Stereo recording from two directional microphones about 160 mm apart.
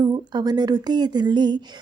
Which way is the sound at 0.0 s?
25° right (ahead or behind).